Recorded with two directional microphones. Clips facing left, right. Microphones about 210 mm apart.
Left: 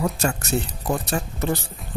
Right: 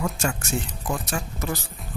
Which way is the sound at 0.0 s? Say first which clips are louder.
Left 3 dB; 40° left (ahead or behind).